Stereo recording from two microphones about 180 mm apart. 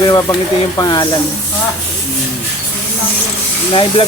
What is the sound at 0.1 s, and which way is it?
Speech, 25° left (ahead or behind).